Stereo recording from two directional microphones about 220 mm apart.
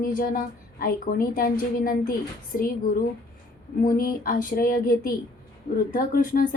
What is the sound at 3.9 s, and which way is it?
A woman's voice, 40° left (ahead or behind).